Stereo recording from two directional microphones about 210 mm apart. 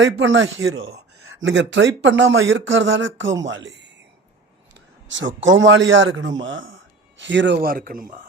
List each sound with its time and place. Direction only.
0.0 s speech: 65° right (ahead or behind)
1.4 s speech: 60° right (ahead or behind)
5.0 s speech: 60° right (ahead or behind); by 8.3 s 40° right (ahead or behind)